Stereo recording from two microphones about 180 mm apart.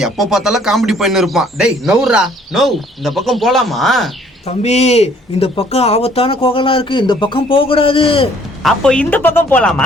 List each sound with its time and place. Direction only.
0.0 s a man's voice: centre (ahead or behind)
4.4 s speech: 35° left (ahead or behind)
8.6 s speech: 5° left (ahead or behind)